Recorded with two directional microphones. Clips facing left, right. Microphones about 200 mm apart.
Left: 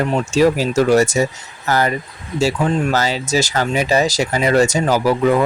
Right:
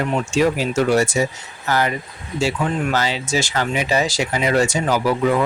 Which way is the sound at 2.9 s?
40° left (ahead or behind).